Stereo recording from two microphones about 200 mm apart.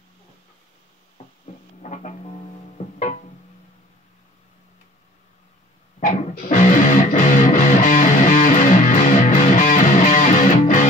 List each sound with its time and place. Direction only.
1.8 s music: 35° left (ahead or behind)
5.9 s music: 40° left (ahead or behind)